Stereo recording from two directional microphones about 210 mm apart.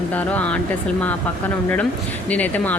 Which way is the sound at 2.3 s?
10° left (ahead or behind).